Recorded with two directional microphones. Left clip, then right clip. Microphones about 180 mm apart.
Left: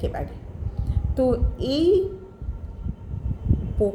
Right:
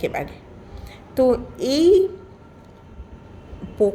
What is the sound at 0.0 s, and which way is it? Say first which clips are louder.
Speech: right 5 dB; 45° right (ahead or behind).